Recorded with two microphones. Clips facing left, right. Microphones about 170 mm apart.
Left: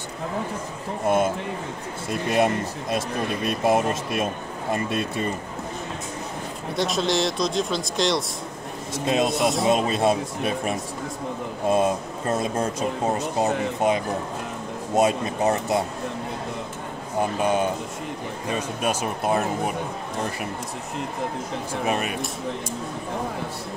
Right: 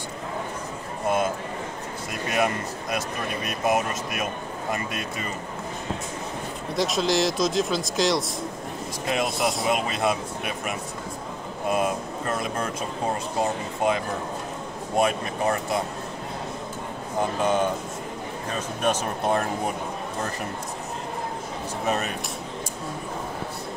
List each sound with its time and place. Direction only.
2.0 s speech: 30° left (ahead or behind)
6.7 s speech: centre (ahead or behind)
9.0 s speech: 20° left (ahead or behind)
17.4 s speech: 10° left (ahead or behind)
18.8 s speech: 10° left (ahead or behind)
21.8 s speech: 10° left (ahead or behind)